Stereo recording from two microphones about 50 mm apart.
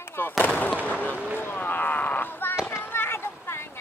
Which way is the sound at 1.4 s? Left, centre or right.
Left.